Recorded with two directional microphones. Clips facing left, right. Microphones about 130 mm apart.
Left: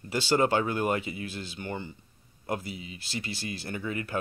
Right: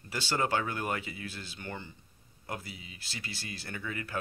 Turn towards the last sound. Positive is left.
turn(degrees=20)  # may be behind; listen again after turning